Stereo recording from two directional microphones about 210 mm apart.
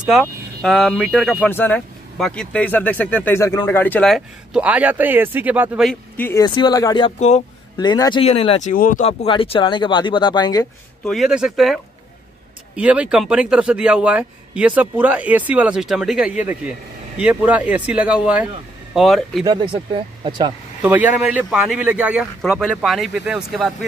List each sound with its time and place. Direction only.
0.0 s speech: centre (ahead or behind); by 7.1 s 20° left (ahead or behind)
7.1 s speech: 35° left (ahead or behind)
7.7 s speech: 20° left (ahead or behind); by 9.0 s 40° left (ahead or behind)
9.0 s speech: 25° left (ahead or behind)
11.1 s a man's voice: centre (ahead or behind)
19.4 s speech: 20° right (ahead or behind)
20.8 s a man's voice: 5° right (ahead or behind)